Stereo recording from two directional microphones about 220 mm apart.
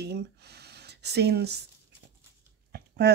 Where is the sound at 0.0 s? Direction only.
50° right (ahead or behind).